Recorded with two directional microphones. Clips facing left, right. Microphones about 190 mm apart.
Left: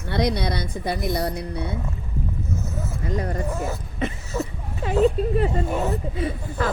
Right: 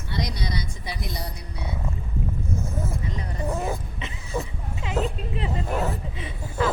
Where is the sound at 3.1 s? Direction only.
45° left (ahead or behind).